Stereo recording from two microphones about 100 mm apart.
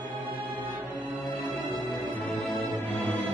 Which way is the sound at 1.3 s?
15° left (ahead or behind).